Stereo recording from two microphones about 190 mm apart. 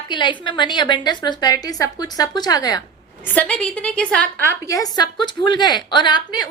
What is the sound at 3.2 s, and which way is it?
A woman's voice, 10° left (ahead or behind).